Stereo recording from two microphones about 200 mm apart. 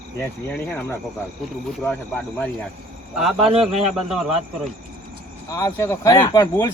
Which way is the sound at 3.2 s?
5° right (ahead or behind).